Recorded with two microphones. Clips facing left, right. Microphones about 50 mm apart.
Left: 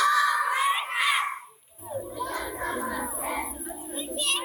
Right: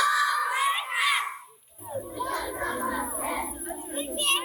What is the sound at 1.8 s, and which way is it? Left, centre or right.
Children playing, centre.